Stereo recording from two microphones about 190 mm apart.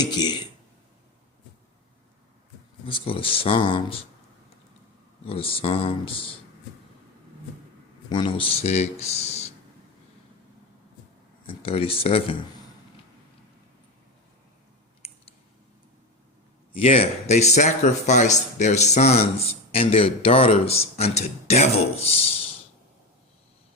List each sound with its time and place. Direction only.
0.0 s speech: 20° left (ahead or behind)
2.8 s speech: 30° left (ahead or behind)
5.2 s speech: 30° left (ahead or behind)
8.1 s speech: 25° left (ahead or behind)
11.4 s speech: 30° left (ahead or behind)
15.0 s clicking: 35° left (ahead or behind)
16.7 s speech: 30° left (ahead or behind)